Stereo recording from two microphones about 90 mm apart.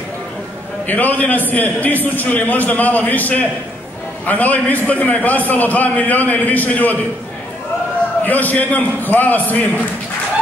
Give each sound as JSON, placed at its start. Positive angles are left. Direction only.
{"t": 0.8, "sound": "a man's voice", "side_deg": 20}
{"t": 8.2, "sound": "a man's voice", "side_deg": 20}